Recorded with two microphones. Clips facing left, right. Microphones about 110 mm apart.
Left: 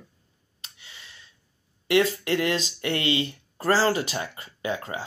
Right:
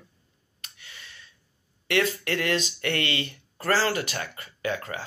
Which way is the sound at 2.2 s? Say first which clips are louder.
Left 2 dB; 20° left (ahead or behind).